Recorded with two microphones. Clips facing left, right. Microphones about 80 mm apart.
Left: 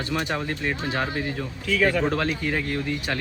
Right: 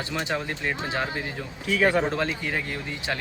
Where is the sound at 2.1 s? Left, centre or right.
Centre.